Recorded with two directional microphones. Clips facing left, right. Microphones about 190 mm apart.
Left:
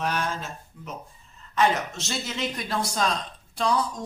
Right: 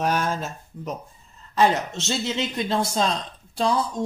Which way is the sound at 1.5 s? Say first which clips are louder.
Right 3 dB; 25° right (ahead or behind).